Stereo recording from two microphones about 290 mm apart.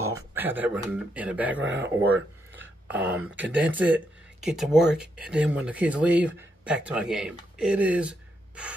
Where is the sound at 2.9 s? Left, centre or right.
Centre.